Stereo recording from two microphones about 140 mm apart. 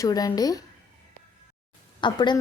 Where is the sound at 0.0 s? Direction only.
25° left (ahead or behind).